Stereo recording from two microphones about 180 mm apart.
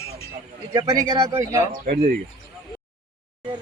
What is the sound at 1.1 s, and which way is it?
Speech, 20° right (ahead or behind).